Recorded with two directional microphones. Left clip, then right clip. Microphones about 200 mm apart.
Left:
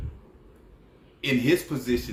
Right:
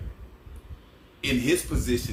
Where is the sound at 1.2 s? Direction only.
5° right (ahead or behind).